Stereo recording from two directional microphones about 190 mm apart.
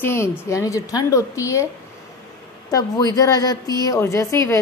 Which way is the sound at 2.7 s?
20° left (ahead or behind).